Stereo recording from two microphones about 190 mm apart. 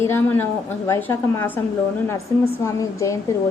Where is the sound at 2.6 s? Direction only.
15° left (ahead or behind).